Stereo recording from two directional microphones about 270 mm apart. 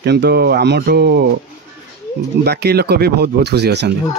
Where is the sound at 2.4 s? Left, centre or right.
Right.